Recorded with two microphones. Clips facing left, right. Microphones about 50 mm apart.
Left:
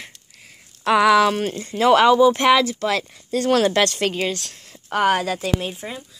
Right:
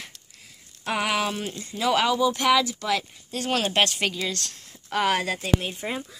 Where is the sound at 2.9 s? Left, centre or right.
Left.